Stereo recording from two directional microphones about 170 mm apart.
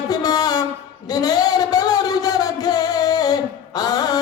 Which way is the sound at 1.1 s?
20° left (ahead or behind).